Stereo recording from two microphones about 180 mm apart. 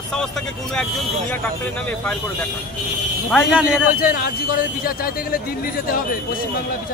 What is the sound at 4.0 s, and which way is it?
Speech, 55° left (ahead or behind).